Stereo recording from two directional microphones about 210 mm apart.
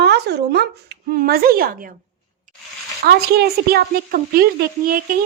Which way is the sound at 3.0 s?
50° right (ahead or behind).